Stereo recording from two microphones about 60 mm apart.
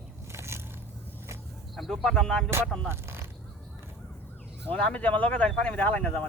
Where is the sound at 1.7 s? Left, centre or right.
Centre.